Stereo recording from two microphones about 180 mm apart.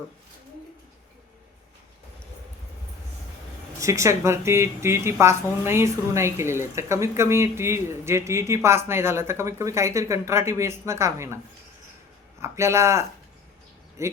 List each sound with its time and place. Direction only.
3.8 s speech: 15° right (ahead or behind)
12.4 s speech: 15° right (ahead or behind)